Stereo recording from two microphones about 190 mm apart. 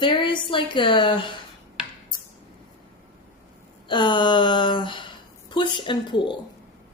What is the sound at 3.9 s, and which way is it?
Speech, 25° left (ahead or behind).